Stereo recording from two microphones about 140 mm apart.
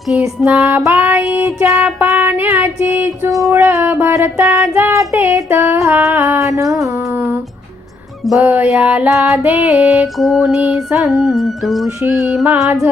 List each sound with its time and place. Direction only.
0.1 s child singing: 5° right (ahead or behind)
8.3 s child singing: 10° right (ahead or behind)
10.2 s music: centre (ahead or behind)
10.5 s child singing: 10° right (ahead or behind)
11.0 s music: centre (ahead or behind)
12.0 s mantra: 20° right (ahead or behind)
12.3 s music: 5° right (ahead or behind)